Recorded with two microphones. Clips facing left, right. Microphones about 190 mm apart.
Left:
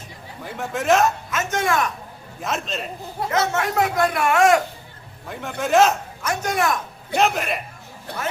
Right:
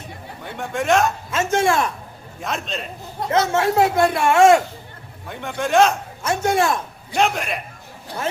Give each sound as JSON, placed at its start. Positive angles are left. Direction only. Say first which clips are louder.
{"t": 0.4, "sound": "a man's voice", "louder": "even", "side_deg": 0}
{"t": 1.3, "sound": "speech", "louder": "right 4 dB", "side_deg": -30}
{"t": 2.4, "sound": "a man's voice", "louder": "even", "side_deg": 0}
{"t": 3.2, "sound": "speech", "louder": "right 4 dB", "side_deg": -30}
{"t": 5.3, "sound": "a man's voice", "louder": "even", "side_deg": 0}
{"t": 6.2, "sound": "speech", "louder": "right 3 dB", "side_deg": -25}
{"t": 7.2, "sound": "a man's voice", "louder": "even", "side_deg": 0}